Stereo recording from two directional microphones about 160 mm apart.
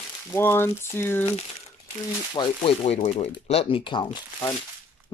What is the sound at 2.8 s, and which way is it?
Speech, 45° left (ahead or behind).